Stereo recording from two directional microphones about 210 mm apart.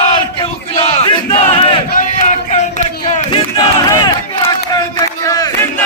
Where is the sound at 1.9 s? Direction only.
40° left (ahead or behind); by 5.5 s 15° left (ahead or behind).